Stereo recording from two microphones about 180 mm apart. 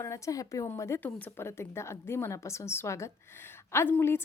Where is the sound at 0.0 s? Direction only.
15° left (ahead or behind).